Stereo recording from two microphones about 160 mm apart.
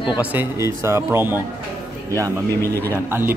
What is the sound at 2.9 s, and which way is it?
Speech, 15° right (ahead or behind).